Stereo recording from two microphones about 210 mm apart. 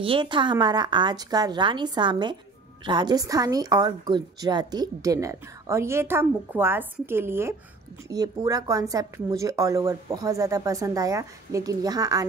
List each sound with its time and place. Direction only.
0.0 s a woman's voice: 25° right (ahead or behind)